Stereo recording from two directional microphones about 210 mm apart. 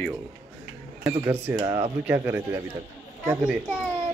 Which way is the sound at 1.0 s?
10° right (ahead or behind).